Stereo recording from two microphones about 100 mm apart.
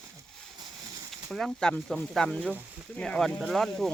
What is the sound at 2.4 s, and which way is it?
Speech, 15° right (ahead or behind).